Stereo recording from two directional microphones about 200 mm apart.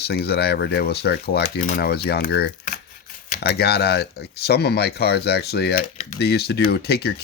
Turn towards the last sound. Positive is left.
turn(degrees=55)  # may be behind; listen again after turning